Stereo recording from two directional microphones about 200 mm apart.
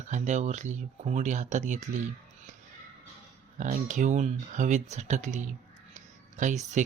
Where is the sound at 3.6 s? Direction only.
40° right (ahead or behind).